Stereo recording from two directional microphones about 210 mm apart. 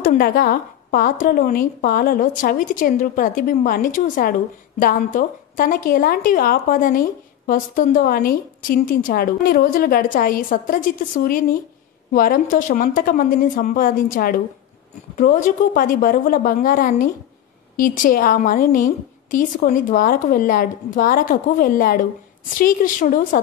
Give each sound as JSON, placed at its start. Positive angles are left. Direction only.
{"t": 0.0, "sound": "a woman's voice", "side_deg": 40}